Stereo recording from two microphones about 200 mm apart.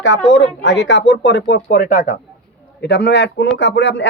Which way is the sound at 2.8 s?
55° left (ahead or behind).